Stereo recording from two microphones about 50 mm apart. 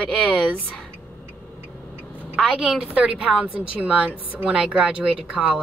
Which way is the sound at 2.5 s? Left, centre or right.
Centre.